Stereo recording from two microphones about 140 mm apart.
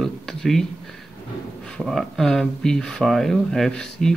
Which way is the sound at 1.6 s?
5° left (ahead or behind).